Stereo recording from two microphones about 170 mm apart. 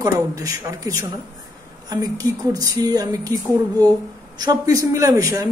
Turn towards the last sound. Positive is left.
turn(degrees=-20)  # may be behind; listen again after turning